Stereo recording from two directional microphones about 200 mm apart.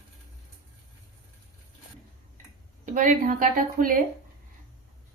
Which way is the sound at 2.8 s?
40° right (ahead or behind).